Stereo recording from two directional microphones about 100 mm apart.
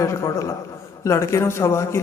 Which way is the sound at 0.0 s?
30° left (ahead or behind).